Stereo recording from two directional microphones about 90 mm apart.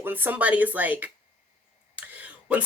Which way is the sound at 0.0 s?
20° right (ahead or behind).